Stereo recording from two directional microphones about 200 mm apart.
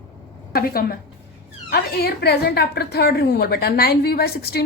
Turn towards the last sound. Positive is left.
turn(degrees=50)  # may be behind; listen again after turning